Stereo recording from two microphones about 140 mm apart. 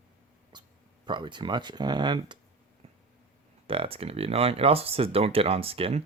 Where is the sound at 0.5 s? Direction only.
35° right (ahead or behind).